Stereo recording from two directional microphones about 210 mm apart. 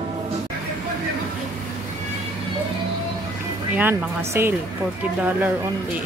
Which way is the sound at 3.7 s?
10° right (ahead or behind).